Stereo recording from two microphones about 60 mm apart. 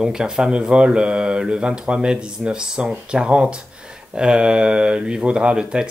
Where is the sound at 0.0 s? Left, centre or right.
Centre.